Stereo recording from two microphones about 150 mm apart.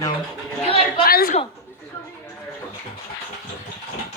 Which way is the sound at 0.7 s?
40° left (ahead or behind).